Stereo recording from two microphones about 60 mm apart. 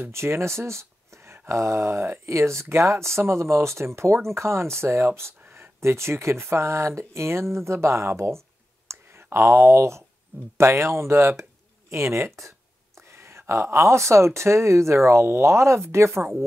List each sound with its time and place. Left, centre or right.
0.0 s speech: right